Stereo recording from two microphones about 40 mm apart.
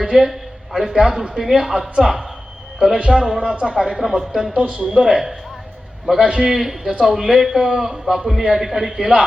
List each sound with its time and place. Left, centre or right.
0.3 s a sound: centre
1.4 s a man's voice: centre
3.6 s speech: centre
3.9 s a woman's voice: centre
4.5 s speech: right
4.9 s a man's voice: centre